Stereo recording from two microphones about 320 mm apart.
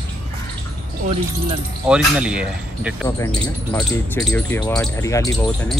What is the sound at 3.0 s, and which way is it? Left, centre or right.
Speech, centre.